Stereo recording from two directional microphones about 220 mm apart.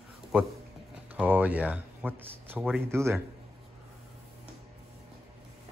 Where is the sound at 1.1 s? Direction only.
5° right (ahead or behind).